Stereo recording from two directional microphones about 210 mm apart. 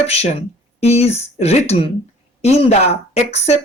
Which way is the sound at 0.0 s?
30° left (ahead or behind).